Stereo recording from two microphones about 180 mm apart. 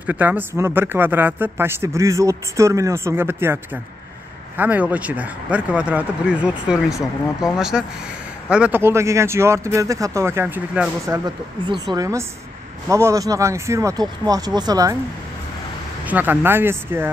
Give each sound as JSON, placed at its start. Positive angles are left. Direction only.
{"t": 0.0, "sound": "speech", "side_deg": -10}
{"t": 11.1, "sound": "speech", "side_deg": -25}
{"t": 16.1, "sound": "speech", "side_deg": -10}